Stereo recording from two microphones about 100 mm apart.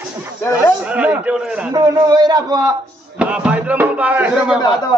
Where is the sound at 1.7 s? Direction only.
40° right (ahead or behind).